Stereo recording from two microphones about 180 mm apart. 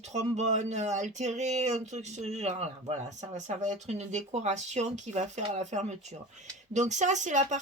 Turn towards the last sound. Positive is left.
turn(degrees=-40)  # may be behind; listen again after turning